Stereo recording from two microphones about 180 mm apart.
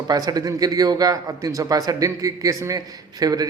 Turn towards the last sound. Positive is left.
turn(degrees=-20)  # may be behind; listen again after turning